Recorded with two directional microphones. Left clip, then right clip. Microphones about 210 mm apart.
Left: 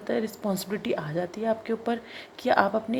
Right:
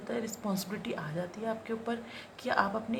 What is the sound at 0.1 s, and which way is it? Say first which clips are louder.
Speech: left 7 dB; 25° left (ahead or behind).